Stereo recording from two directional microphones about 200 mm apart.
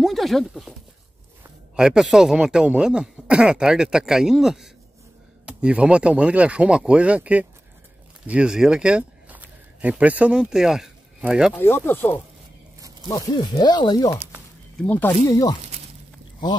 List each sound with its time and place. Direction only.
0.0 s speech: centre (ahead or behind)
1.8 s speech: 5° right (ahead or behind)
11.5 s speech: 10° left (ahead or behind)
14.8 s speech: 10° left (ahead or behind)